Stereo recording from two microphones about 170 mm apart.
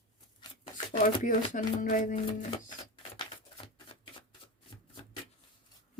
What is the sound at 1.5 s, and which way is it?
Speech, 50° left (ahead or behind).